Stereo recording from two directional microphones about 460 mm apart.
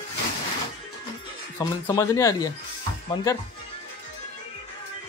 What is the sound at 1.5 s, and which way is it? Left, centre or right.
Speech, centre.